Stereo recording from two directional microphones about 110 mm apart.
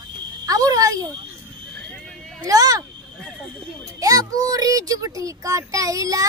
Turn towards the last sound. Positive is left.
turn(degrees=-30)  # may be behind; listen again after turning